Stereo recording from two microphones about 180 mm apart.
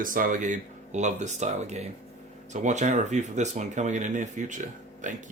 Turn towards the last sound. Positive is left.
turn(degrees=-45)  # may be behind; listen again after turning